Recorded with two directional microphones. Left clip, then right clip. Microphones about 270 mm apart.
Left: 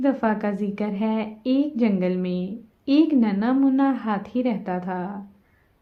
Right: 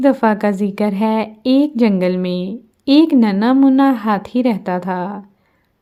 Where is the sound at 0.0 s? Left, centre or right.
Right.